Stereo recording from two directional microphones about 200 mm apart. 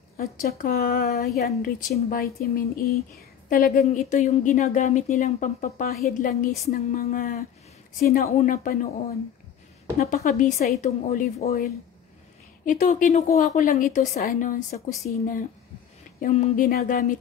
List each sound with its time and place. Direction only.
0.2 s speech: 40° left (ahead or behind)
9.9 s speech: 40° left (ahead or behind)
12.6 s speech: 40° left (ahead or behind)